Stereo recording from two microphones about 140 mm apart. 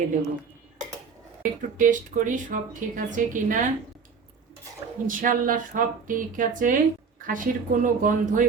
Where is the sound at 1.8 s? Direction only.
70° right (ahead or behind).